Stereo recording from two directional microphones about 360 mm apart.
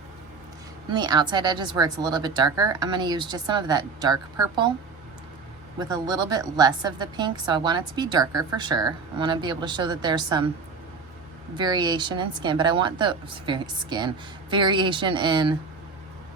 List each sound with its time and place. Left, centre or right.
0.9 s a woman's voice: centre
5.9 s a woman's voice: centre
11.5 s a woman's voice: centre